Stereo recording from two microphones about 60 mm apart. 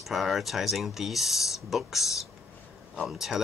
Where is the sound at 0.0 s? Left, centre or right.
Centre.